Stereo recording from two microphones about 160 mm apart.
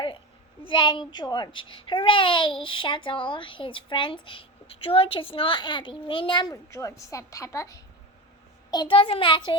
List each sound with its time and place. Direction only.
0.6 s a child's voice: 30° left (ahead or behind)
8.7 s a child's voice: 30° left (ahead or behind)